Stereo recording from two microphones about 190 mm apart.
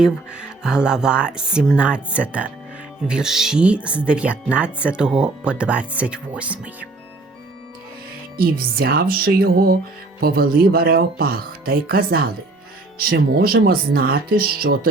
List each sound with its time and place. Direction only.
0.0 s speech: 5° right (ahead or behind)
8.4 s speech: 50° right (ahead or behind)